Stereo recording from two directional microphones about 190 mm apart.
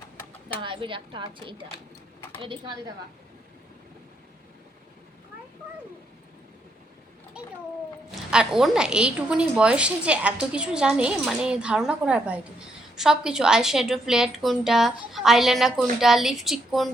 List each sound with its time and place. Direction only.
0.4 s a woman's voice: 25° right (ahead or behind)
7.3 s a child's voice: 5° right (ahead or behind)